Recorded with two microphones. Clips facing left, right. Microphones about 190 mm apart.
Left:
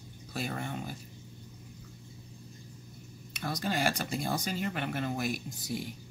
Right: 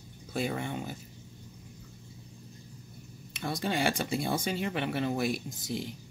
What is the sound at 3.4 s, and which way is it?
Speech, 25° right (ahead or behind).